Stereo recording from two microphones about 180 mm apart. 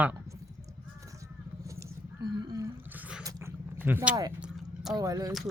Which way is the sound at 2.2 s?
20° right (ahead or behind).